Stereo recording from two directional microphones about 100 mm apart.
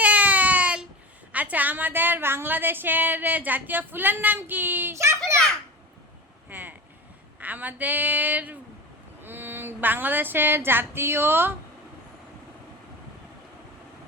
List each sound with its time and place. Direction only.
0.0 s baby cry: 15° right (ahead or behind)
1.3 s a woman's voice: 15° right (ahead or behind)
6.5 s vehicle: 20° right (ahead or behind)
7.3 s a woman's voice: 15° right (ahead or behind)